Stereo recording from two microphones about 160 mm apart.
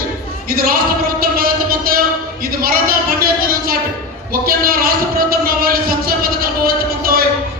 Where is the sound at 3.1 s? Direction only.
65° right (ahead or behind).